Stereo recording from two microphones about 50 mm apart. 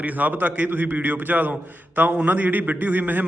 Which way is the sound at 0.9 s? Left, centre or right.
Right.